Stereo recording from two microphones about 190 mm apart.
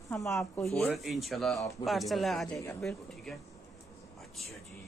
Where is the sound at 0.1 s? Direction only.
15° left (ahead or behind).